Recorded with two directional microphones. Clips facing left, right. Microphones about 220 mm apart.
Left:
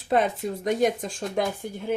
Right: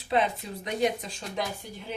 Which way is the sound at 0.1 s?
45° left (ahead or behind).